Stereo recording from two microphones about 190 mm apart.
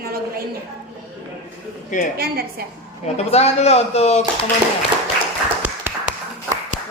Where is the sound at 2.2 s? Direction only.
55° right (ahead or behind).